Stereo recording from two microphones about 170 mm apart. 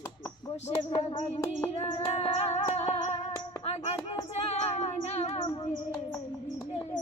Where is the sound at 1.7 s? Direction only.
35° left (ahead or behind).